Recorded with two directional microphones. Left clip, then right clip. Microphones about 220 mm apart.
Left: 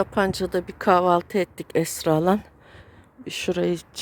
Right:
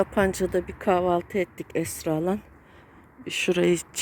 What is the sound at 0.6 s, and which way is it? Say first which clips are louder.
A woman's voice: left 7 dB; 20° left (ahead or behind).